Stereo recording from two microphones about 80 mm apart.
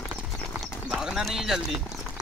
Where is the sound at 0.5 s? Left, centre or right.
Centre.